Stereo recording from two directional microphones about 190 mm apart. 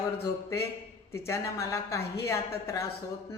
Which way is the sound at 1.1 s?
15° left (ahead or behind).